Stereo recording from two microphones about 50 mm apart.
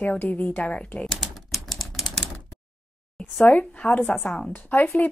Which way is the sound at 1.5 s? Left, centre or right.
Centre.